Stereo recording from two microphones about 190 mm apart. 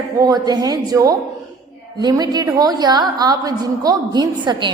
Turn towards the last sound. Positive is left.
turn(degrees=-25)  # may be behind; listen again after turning